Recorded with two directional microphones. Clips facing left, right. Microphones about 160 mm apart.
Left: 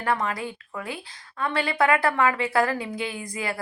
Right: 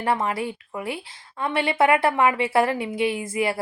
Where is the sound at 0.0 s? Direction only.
25° right (ahead or behind).